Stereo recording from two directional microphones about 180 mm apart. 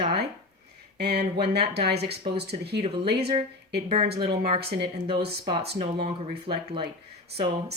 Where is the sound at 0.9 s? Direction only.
65° right (ahead or behind).